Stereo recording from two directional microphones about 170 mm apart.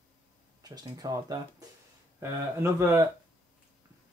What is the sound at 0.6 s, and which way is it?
Speech, 20° right (ahead or behind).